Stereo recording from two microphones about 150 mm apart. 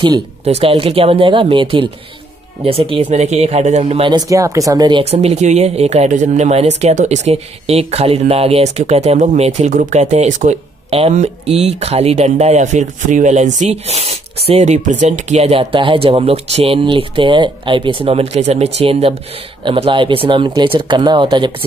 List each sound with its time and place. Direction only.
0.5 s speech: 40° right (ahead or behind)
4.1 s speech: 20° right (ahead or behind)
5.1 s speech: 45° right (ahead or behind)